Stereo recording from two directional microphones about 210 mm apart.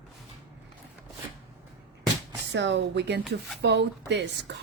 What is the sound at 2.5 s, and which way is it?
A woman's voice, 60° right (ahead or behind).